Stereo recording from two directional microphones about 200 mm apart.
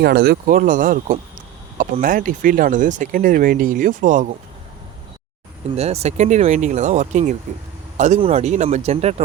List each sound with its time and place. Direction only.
0.0 s speech: 50° right (ahead or behind)
5.7 s speech: 30° right (ahead or behind)